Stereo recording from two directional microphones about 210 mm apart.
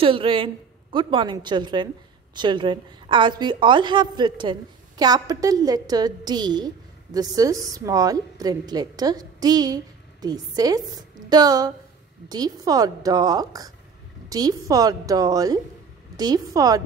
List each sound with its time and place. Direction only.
0.0 s a woman's voice: 25° right (ahead or behind)